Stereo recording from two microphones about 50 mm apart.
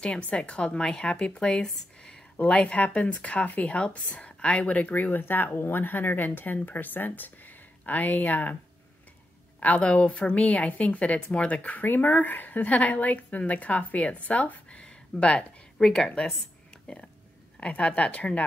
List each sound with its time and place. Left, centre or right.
0.3 s a woman's voice: left
2.3 s speech: left
9.6 s a woman's voice: left
11.8 s a woman's voice: left